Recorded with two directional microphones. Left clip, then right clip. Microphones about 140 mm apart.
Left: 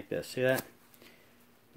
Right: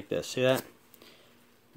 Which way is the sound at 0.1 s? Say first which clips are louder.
Right 3 dB; 40° right (ahead or behind).